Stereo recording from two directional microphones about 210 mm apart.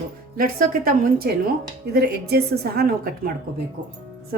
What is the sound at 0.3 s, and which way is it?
Speech, 45° right (ahead or behind).